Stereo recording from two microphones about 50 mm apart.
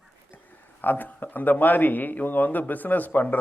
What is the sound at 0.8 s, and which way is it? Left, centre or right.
A man's voice, left.